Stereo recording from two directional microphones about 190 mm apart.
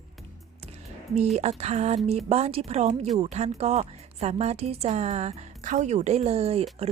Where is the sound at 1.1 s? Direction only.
35° right (ahead or behind).